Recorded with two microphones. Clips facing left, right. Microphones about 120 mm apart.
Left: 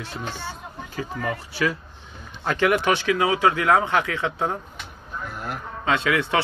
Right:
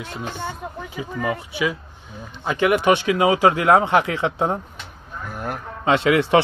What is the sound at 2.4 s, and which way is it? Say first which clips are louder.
Speech: right 3 dB; 15° right (ahead or behind).